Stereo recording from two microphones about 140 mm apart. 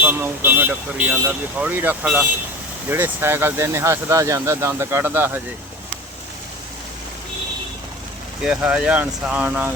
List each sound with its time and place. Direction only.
0.0 s speech: 15° right (ahead or behind)
8.4 s speech: 5° right (ahead or behind)